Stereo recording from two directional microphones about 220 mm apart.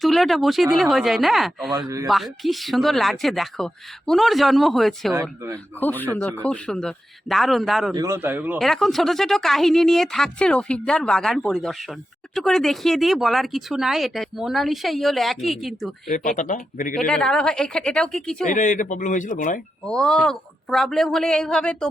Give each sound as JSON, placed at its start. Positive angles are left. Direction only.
{"t": 0.0, "sound": "speech", "side_deg": 0}
{"t": 5.1, "sound": "a man's voice", "side_deg": -15}
{"t": 5.8, "sound": "a man's voice", "side_deg": 10}
{"t": 7.9, "sound": "a man's voice", "side_deg": -15}
{"t": 16.0, "sound": "speech", "side_deg": 35}
{"t": 17.1, "sound": "speech", "side_deg": 5}
{"t": 18.4, "sound": "speech", "side_deg": 35}
{"t": 19.8, "sound": "speech", "side_deg": 5}